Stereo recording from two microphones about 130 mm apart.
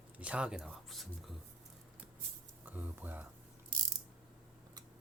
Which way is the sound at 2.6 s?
15° right (ahead or behind).